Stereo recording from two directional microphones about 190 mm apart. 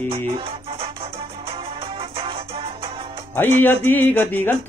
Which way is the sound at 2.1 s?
30° right (ahead or behind).